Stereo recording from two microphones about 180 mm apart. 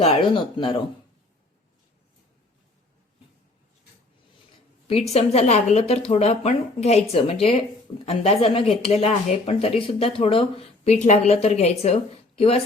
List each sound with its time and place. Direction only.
0.0 s speech: 30° left (ahead or behind)
5.1 s speech: 35° left (ahead or behind)